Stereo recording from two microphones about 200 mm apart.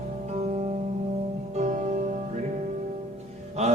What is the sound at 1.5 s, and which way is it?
Music, 35° right (ahead or behind).